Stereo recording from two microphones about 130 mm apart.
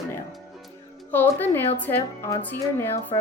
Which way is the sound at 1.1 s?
15° left (ahead or behind).